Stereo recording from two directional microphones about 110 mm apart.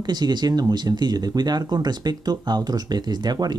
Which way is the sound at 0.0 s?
40° right (ahead or behind).